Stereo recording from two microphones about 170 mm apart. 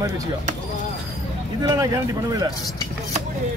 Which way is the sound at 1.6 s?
20° right (ahead or behind).